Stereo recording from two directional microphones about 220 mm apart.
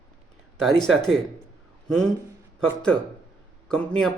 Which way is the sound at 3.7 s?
5° left (ahead or behind).